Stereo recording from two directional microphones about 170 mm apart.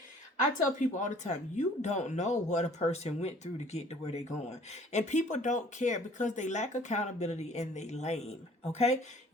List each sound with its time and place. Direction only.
0.8 s speech: 45° left (ahead or behind)